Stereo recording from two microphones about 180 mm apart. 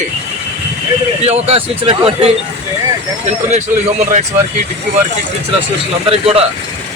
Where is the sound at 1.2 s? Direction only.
35° right (ahead or behind).